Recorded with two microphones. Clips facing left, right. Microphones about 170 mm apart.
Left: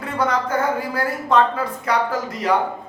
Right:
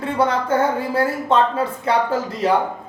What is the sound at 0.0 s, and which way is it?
Speech, 30° right (ahead or behind).